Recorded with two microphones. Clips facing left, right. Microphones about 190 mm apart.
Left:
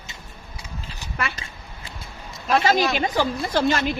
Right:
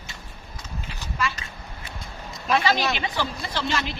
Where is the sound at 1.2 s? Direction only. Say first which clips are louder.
Right 1 dB; 60° left (ahead or behind).